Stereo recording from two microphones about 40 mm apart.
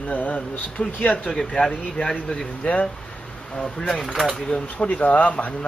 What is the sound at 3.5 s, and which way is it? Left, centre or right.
Speech, centre.